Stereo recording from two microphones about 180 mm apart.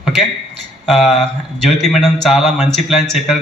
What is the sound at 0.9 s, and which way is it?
A man's voice, centre (ahead or behind).